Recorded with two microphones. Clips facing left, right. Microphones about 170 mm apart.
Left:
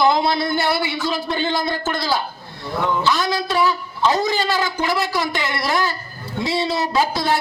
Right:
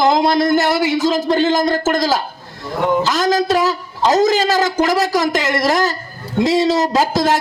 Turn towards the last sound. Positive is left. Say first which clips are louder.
# right 4 dB
turn(degrees=-40)  # may be behind; listen again after turning